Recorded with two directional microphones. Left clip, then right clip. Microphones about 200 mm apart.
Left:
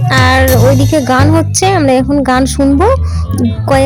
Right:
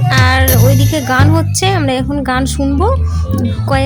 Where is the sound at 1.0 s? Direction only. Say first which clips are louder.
Left 3 dB; 5° left (ahead or behind).